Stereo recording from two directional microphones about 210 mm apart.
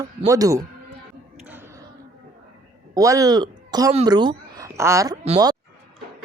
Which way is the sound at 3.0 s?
15° right (ahead or behind).